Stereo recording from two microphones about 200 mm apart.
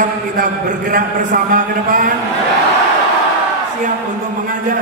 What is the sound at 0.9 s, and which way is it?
A man's voice, 45° right (ahead or behind).